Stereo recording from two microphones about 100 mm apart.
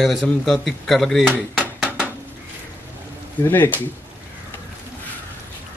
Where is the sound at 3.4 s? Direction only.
20° left (ahead or behind).